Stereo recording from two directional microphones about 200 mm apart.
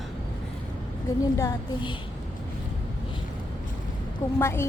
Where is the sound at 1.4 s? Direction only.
20° left (ahead or behind).